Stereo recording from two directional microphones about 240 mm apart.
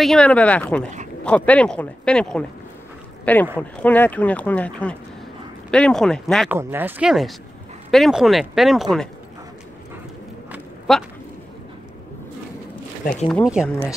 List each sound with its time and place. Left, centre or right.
0.0 s speech: centre
10.5 s walk: centre
13.0 s speech: left
13.3 s speech: centre